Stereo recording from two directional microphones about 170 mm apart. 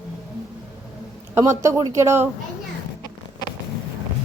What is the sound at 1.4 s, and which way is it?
Speech, 15° right (ahead or behind).